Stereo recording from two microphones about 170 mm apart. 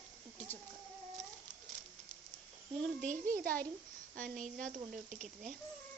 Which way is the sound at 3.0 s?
50° right (ahead or behind).